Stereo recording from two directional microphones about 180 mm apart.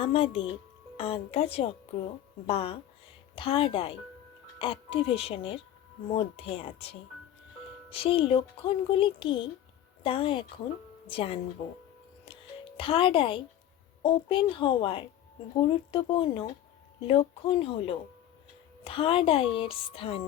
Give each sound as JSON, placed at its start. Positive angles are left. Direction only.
{"t": 0.0, "sound": "a woman's voice", "side_deg": 30}
{"t": 12.2, "sound": "music", "side_deg": 30}
{"t": 14.0, "sound": "a woman's voice", "side_deg": 25}